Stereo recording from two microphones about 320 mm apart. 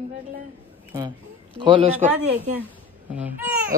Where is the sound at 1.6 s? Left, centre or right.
Centre.